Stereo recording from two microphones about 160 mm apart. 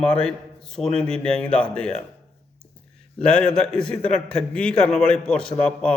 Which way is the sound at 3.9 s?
45° left (ahead or behind).